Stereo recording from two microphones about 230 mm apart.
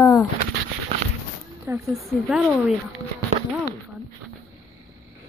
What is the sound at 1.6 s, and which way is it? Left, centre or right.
Speech, centre.